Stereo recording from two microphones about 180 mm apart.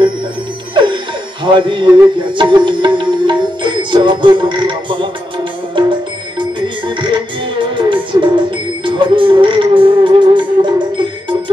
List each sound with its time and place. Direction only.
1.4 s music: 25° right (ahead or behind)
7.0 s music: 25° right (ahead or behind)